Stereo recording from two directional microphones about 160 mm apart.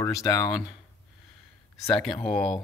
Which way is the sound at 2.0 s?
5° left (ahead or behind).